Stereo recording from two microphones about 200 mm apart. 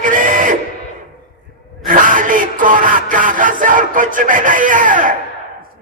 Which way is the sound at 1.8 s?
40° right (ahead or behind).